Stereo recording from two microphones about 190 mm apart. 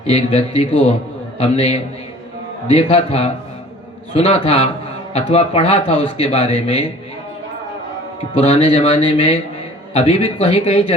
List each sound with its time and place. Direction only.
0.1 s a man's voice: 35° left (ahead or behind)
8.4 s a man's voice: 35° left (ahead or behind)